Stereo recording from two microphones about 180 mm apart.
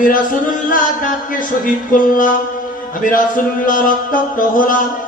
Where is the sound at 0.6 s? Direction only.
50° left (ahead or behind).